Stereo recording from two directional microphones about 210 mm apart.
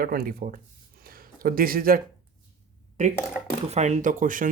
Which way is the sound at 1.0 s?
45° right (ahead or behind).